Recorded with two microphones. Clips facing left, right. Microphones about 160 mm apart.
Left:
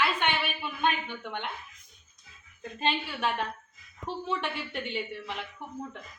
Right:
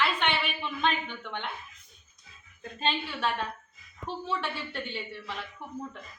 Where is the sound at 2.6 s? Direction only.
15° left (ahead or behind).